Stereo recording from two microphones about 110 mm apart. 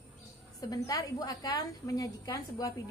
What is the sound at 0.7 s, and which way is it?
A woman's voice, 30° left (ahead or behind).